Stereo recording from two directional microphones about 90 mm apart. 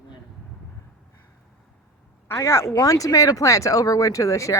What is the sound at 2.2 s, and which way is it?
Speech, 30° left (ahead or behind).